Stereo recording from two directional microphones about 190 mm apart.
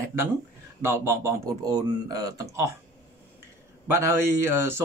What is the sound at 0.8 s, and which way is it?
Speech, 15° right (ahead or behind).